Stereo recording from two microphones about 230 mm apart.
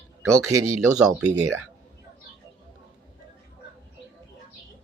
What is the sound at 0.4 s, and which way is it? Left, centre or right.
Speech, right.